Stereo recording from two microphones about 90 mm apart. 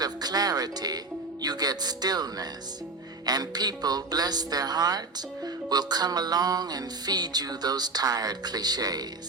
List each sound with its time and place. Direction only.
0.0 s speech: 45° right (ahead or behind)
1.4 s music: 50° right (ahead or behind)